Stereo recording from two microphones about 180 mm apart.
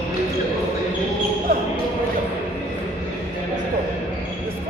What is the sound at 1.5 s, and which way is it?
Basketball bounce, 55° right (ahead or behind).